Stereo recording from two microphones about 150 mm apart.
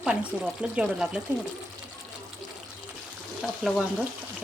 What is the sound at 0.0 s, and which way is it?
Speech, 5° right (ahead or behind).